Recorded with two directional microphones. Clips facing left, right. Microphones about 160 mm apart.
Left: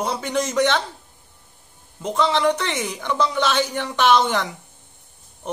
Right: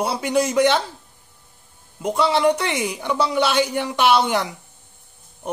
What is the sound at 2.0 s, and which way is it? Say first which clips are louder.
Speech: right 2 dB; 10° right (ahead or behind).